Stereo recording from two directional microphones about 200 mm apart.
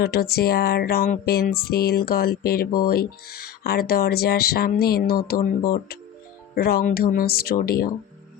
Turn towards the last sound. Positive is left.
turn(degrees=45)  # may be behind; listen again after turning